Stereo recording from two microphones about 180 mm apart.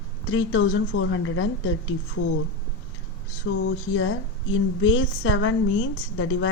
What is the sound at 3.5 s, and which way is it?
A woman's voice, 90° left.